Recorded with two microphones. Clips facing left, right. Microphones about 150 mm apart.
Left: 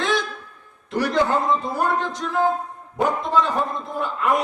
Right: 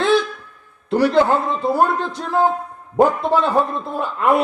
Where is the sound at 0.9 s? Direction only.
30° right (ahead or behind).